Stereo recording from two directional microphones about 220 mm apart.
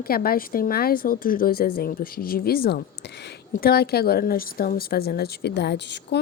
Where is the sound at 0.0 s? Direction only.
45° left (ahead or behind).